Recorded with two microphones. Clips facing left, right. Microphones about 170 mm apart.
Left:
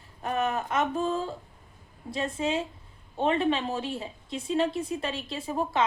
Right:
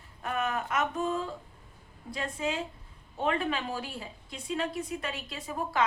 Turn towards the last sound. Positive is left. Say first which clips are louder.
# left 3 dB
turn(degrees=25)  # may be behind; listen again after turning